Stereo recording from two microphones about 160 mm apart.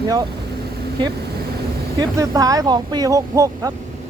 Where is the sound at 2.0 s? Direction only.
20° right (ahead or behind).